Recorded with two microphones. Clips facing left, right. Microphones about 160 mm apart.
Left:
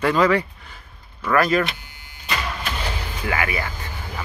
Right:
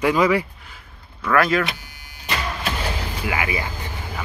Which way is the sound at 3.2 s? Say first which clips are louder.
Left 1 dB; 15° right (ahead or behind).